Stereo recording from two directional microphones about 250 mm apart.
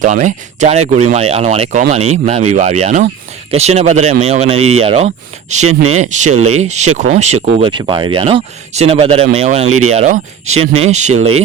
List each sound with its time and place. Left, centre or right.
0.0 s speech: right
5.6 s speech: right
6.0 s speech: right